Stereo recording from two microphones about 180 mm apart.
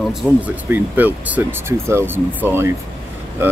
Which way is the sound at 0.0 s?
Centre (ahead or behind).